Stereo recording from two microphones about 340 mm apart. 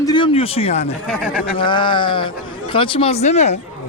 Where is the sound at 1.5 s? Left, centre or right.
Centre.